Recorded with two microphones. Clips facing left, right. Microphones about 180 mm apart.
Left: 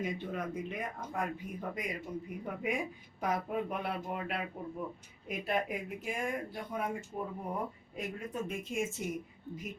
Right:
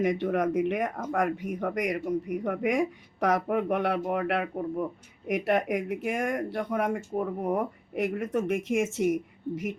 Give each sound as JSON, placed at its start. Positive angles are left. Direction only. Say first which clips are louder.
{"t": 0.0, "sound": "speech", "louder": "right 11 dB", "side_deg": -75}
{"t": 5.3, "sound": "speech", "louder": "right 9 dB", "side_deg": -75}